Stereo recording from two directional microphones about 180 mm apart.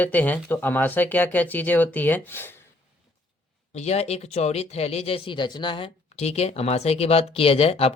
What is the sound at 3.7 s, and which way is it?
Speech, 40° left (ahead or behind).